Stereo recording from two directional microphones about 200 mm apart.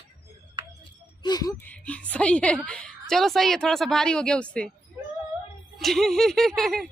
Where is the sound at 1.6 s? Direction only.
5° left (ahead or behind).